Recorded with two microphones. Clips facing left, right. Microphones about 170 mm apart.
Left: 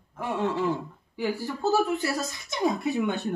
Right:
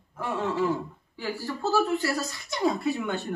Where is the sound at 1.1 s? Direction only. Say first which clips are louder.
Left 3 dB; 15° left (ahead or behind).